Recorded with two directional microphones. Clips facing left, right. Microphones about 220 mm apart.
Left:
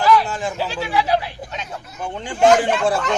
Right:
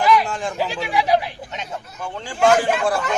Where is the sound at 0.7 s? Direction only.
15° right (ahead or behind).